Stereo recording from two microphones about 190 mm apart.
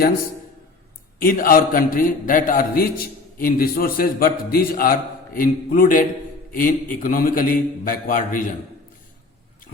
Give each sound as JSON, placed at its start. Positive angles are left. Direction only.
{"t": 1.2, "sound": "a man's voice", "side_deg": 50}